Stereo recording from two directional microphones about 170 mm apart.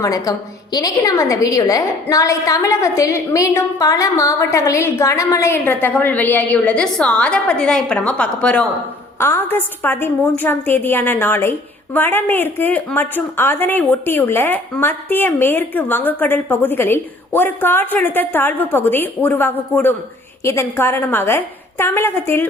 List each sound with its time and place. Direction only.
0.0 s a woman's voice: 20° left (ahead or behind)